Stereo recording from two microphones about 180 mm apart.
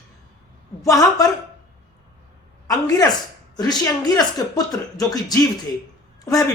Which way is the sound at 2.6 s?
20° left (ahead or behind).